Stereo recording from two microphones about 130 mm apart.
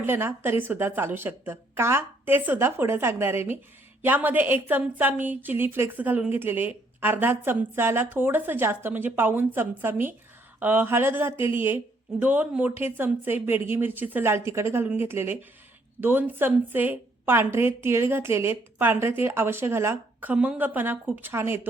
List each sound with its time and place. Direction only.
0.0 s a woman's voice: 15° right (ahead or behind)